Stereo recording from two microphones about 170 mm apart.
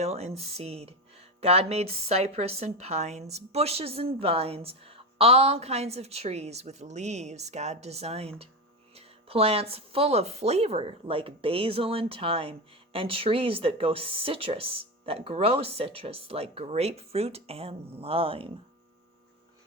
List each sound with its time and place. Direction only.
0.0 s speech: 40° right (ahead or behind)